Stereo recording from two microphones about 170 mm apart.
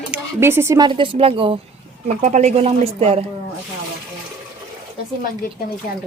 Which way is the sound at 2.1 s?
45° right (ahead or behind).